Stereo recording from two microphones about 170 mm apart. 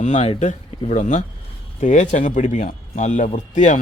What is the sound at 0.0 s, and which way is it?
Speech, 40° left (ahead or behind).